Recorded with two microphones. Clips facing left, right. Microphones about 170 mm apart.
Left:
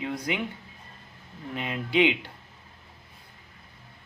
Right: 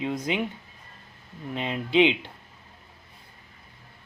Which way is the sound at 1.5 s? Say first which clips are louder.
Right 3 dB; 25° right (ahead or behind).